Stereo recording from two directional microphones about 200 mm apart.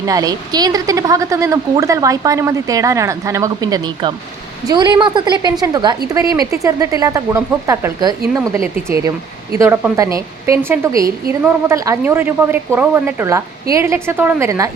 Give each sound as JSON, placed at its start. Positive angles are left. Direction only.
{"t": 0.0, "sound": "a woman's voice", "side_deg": -20}
{"t": 9.6, "sound": "a woman's voice", "side_deg": -10}